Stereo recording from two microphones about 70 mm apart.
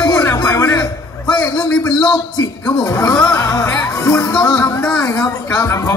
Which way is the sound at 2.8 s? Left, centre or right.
Left.